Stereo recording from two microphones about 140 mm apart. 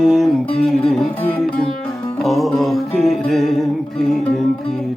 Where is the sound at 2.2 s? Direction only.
Centre (ahead or behind).